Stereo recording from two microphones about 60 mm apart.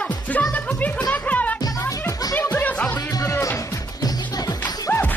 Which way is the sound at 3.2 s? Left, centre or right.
Left.